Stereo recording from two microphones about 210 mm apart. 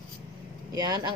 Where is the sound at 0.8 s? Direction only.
20° right (ahead or behind).